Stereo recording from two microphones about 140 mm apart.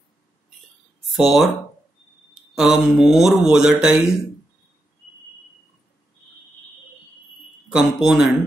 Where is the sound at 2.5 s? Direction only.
5° right (ahead or behind).